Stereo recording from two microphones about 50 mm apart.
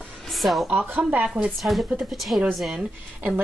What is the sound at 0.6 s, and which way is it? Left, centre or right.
Speech, right.